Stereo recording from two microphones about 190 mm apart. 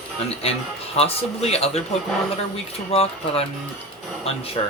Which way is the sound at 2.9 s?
30° left (ahead or behind).